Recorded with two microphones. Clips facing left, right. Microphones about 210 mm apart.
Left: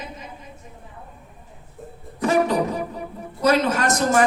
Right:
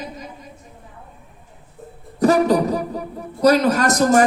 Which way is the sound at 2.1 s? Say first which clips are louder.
Right 4 dB; 40° right (ahead or behind).